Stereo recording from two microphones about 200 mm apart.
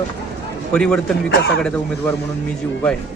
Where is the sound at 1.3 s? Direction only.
55° left (ahead or behind).